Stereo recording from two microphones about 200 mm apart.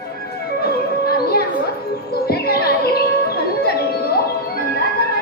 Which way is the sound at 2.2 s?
50° left (ahead or behind).